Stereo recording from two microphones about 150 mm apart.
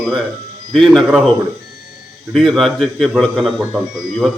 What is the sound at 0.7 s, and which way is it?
Speech, centre (ahead or behind).